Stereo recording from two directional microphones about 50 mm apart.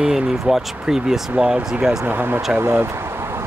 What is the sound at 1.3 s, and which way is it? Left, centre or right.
Speech, right.